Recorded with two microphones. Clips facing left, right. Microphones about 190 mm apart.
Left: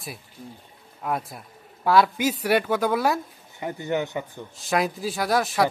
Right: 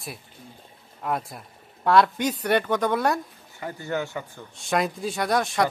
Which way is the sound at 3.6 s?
20° left (ahead or behind).